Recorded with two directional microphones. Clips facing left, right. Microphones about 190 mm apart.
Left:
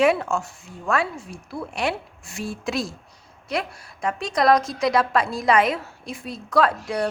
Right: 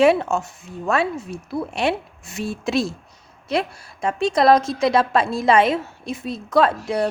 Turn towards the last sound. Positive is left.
turn(degrees=-25)  # may be behind; listen again after turning